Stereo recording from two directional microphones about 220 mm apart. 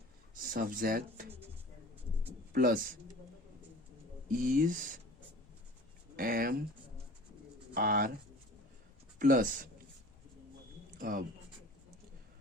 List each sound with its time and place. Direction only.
0.5 s speech: 40° right (ahead or behind)
2.5 s speech: 40° right (ahead or behind)
4.3 s speech: 40° right (ahead or behind)
6.1 s speech: 40° right (ahead or behind)
7.7 s speech: 40° right (ahead or behind)
9.1 s speech: 40° right (ahead or behind)
10.9 s speech: 40° right (ahead or behind)